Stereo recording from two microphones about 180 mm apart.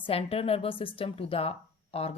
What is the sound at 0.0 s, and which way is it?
Speech, 35° left (ahead or behind).